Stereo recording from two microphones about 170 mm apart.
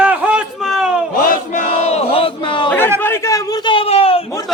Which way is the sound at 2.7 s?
10° left (ahead or behind).